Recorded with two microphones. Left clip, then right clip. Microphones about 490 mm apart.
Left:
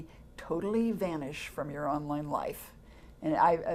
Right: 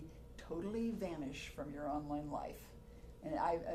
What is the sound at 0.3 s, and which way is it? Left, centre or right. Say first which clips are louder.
Speech: left 11 dB; left.